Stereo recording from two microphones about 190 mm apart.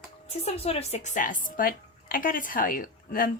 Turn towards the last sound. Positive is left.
turn(degrees=50)  # may be behind; listen again after turning